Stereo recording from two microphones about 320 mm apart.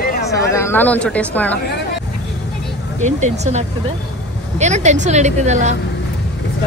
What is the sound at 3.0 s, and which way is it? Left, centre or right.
A woman's voice, right.